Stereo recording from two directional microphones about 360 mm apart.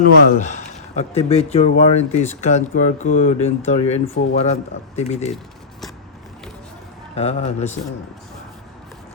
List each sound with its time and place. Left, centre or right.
0.0 s speech: left
7.2 s speech: centre